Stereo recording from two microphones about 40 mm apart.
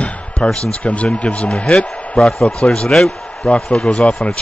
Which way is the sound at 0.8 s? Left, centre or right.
Left.